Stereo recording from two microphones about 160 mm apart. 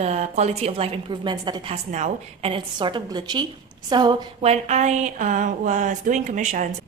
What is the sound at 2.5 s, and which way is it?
A woman's voice, 30° right (ahead or behind).